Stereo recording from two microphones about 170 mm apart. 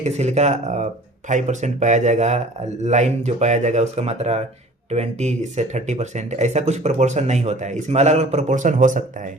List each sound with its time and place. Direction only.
0.0 s speech: 40° right (ahead or behind)